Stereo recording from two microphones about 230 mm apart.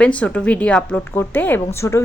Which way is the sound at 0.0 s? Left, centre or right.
Centre.